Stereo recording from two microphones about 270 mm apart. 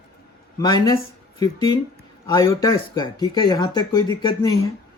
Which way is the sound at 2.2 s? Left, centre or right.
Centre.